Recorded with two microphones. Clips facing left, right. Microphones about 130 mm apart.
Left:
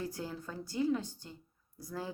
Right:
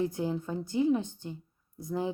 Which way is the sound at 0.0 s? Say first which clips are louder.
Right 9 dB; 20° right (ahead or behind).